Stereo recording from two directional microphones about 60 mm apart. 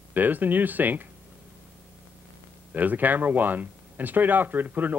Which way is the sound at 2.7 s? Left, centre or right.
Right.